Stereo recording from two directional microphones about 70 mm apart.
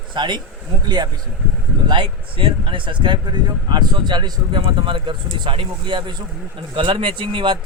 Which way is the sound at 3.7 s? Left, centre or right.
Right.